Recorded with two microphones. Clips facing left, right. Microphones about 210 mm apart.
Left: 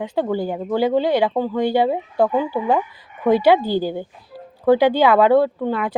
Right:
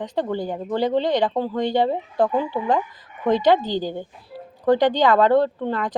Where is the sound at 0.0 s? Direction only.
5° left (ahead or behind).